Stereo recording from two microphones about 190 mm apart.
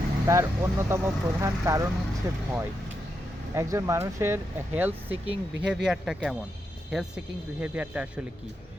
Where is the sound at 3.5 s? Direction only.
15° right (ahead or behind).